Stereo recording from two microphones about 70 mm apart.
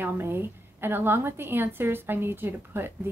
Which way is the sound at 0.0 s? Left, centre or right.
Right.